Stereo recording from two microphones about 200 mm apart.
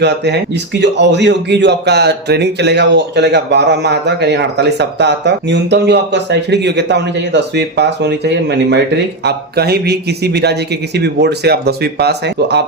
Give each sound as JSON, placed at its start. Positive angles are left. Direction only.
{"t": 0.0, "sound": "a man's voice", "side_deg": -60}